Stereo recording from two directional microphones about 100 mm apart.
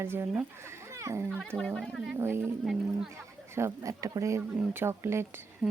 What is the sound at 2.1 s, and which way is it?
Speech, 25° right (ahead or behind).